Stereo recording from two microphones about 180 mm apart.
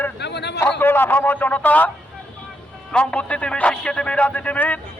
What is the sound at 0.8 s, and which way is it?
A man's voice, 10° left (ahead or behind).